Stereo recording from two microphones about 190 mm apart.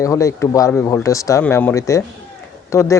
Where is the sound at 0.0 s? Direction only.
15° left (ahead or behind).